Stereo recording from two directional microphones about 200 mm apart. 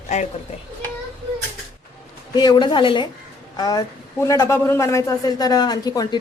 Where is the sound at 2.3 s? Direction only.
20° left (ahead or behind).